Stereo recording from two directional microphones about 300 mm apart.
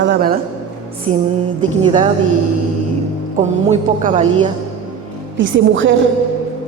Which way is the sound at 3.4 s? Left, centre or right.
Right.